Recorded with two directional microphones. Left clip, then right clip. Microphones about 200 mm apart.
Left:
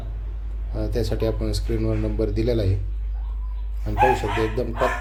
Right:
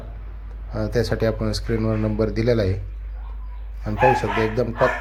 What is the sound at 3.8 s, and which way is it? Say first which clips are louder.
Speech: right 1 dB; 15° right (ahead or behind).